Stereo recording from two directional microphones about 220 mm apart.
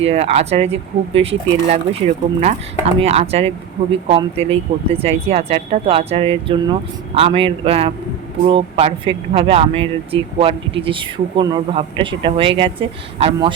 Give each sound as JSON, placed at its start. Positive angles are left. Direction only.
{"t": 0.0, "sound": "speech", "side_deg": -30}
{"t": 4.7, "sound": "speech", "side_deg": -40}
{"t": 5.0, "sound": "speech", "side_deg": -25}